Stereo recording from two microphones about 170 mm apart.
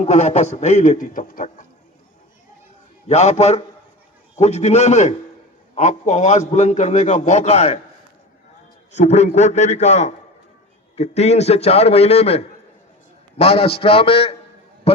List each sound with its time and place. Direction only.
0.0 s a man's voice: 40° left (ahead or behind)
3.1 s a man's voice: 40° left (ahead or behind)
8.9 s a man's voice: 40° left (ahead or behind)